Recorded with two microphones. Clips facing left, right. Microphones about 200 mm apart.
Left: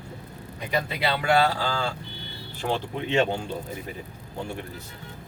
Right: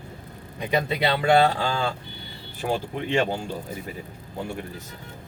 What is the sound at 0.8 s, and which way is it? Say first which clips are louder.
Speech: right 4 dB; 25° right (ahead or behind).